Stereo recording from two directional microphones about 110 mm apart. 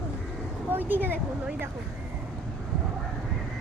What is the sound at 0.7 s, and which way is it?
Speech, 15° right (ahead or behind).